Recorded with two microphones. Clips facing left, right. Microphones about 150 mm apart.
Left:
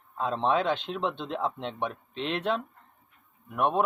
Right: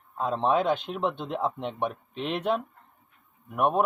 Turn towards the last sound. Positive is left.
turn(degrees=-10)  # may be behind; listen again after turning